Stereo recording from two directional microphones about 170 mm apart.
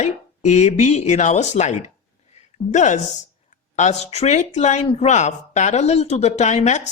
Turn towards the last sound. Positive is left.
turn(degrees=45)  # may be behind; listen again after turning